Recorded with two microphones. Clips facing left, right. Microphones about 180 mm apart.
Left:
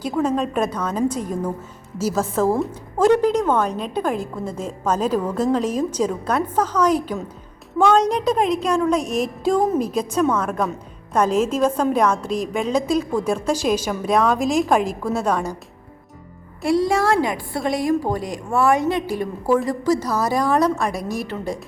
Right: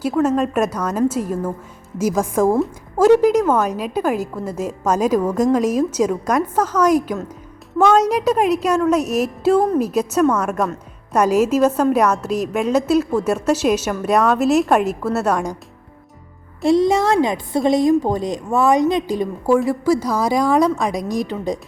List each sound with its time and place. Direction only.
0.0 s a woman's voice: 5° right (ahead or behind)
16.6 s a woman's voice: 20° right (ahead or behind)